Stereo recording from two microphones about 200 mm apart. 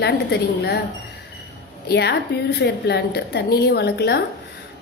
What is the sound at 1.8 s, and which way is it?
A woman's voice, 55° left (ahead or behind).